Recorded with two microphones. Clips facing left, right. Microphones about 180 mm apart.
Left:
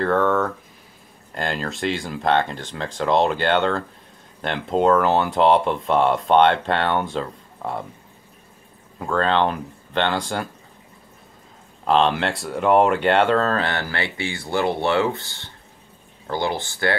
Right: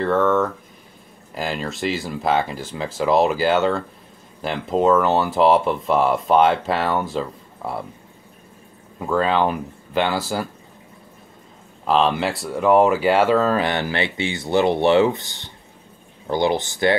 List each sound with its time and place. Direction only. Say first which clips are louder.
0.0 s speech: right 1 dB; centre (ahead or behind)
9.0 s speech: right 1 dB; 5° right (ahead or behind)
11.8 s speech: even; centre (ahead or behind); by 16.9 s 20° right (ahead or behind)